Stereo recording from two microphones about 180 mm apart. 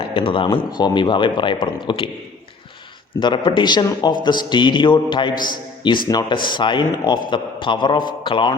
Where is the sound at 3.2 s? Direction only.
25° left (ahead or behind).